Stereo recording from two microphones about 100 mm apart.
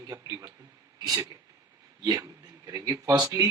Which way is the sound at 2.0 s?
40° right (ahead or behind).